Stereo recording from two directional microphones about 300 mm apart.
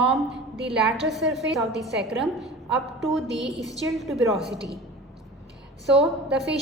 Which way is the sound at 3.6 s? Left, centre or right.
Centre.